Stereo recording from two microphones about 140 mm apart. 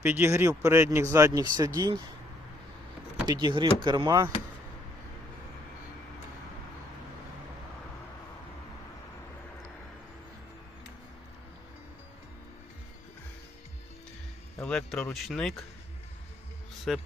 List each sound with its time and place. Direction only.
0.0 s speech: 15° right (ahead or behind)
3.2 s speech: 35° right (ahead or behind)
14.6 s speech: 5° left (ahead or behind)
16.9 s speech: centre (ahead or behind)